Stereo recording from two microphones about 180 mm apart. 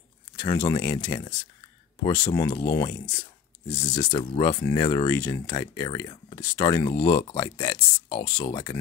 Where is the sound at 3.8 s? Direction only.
30° left (ahead or behind).